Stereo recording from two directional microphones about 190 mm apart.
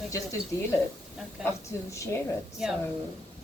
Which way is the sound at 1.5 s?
15° left (ahead or behind).